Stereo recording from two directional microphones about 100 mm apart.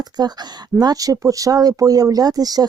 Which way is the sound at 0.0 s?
45° right (ahead or behind).